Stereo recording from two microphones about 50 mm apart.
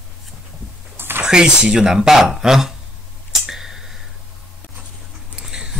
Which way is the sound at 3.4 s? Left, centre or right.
Centre.